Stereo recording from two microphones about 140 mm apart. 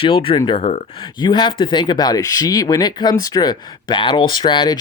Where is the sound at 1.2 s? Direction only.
35° left (ahead or behind).